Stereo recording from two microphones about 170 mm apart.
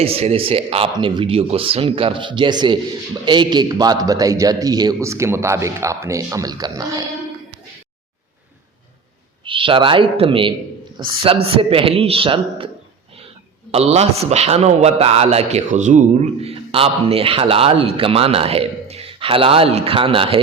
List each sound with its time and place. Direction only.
0.0 s a man's voice: 35° right (ahead or behind)
9.4 s a man's voice: 30° right (ahead or behind)